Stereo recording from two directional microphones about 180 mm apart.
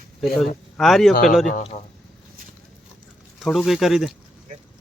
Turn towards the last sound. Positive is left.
turn(degrees=0)  # may be behind; listen again after turning